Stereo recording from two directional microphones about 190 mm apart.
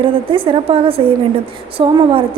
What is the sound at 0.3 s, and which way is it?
A woman's voice, 25° right (ahead or behind).